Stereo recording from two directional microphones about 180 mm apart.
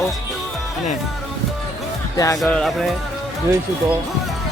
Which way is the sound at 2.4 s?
Centre (ahead or behind).